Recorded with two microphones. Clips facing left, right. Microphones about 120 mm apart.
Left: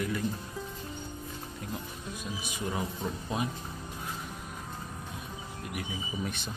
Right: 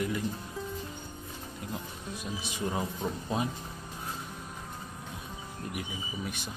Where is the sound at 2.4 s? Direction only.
25° right (ahead or behind).